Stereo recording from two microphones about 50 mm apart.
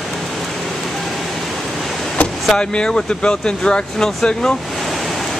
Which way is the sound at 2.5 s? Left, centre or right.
Centre.